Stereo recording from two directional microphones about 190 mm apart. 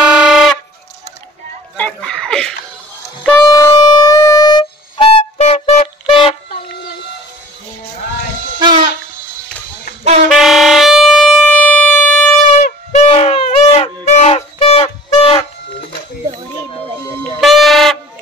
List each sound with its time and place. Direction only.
0.0 s music: 5° right (ahead or behind)
1.8 s a sound: 5° left (ahead or behind)
3.4 s music: 20° left (ahead or behind)
8.5 s music: 25° right (ahead or behind)
10.3 s air horn: centre (ahead or behind)
12.5 s a sound: 35° left (ahead or behind)
17.2 s music: centre (ahead or behind)